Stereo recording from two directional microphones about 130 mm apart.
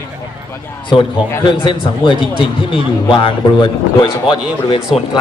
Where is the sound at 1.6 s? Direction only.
40° left (ahead or behind).